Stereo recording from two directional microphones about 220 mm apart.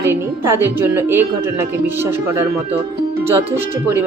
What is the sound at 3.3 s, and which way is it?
Speech, 10° right (ahead or behind).